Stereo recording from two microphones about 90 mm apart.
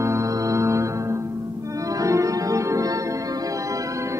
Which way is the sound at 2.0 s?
35° right (ahead or behind).